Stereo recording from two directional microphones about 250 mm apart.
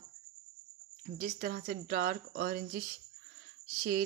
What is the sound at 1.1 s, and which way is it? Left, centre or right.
Speech, right.